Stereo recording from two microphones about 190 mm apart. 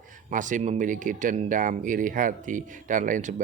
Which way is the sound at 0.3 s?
40° right (ahead or behind).